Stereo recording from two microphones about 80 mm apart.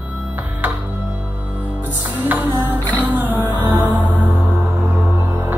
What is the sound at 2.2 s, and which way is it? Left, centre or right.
Music, right.